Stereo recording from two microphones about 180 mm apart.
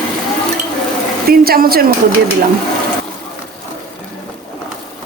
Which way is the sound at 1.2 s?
55° right (ahead or behind).